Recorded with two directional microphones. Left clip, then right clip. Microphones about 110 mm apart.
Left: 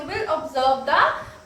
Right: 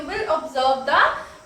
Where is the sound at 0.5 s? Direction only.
35° left (ahead or behind).